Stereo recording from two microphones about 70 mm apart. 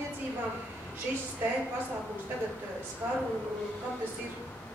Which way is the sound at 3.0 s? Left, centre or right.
Right.